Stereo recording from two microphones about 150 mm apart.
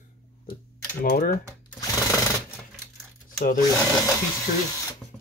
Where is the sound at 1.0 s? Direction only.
70° left (ahead or behind).